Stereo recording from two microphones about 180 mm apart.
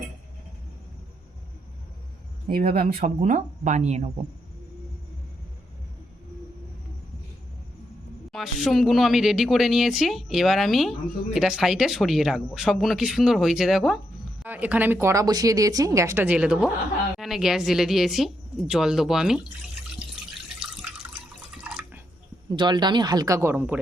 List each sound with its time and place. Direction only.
2.5 s speech: 55° right (ahead or behind); by 4.1 s 40° right (ahead or behind)
8.3 s speech: centre (ahead or behind)
21.5 s drip: 5° right (ahead or behind)
22.5 s speech: 25° right (ahead or behind)